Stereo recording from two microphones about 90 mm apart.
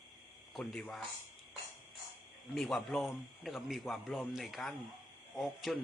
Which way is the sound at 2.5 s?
5° left (ahead or behind).